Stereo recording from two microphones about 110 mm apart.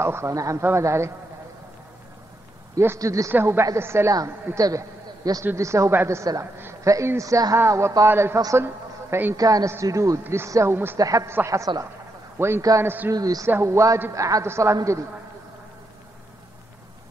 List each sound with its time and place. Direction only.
0.0 s a woman's voice: 25° right (ahead or behind)
2.7 s a woman's voice: 25° right (ahead or behind)
5.4 s a woman's voice: 25° right (ahead or behind)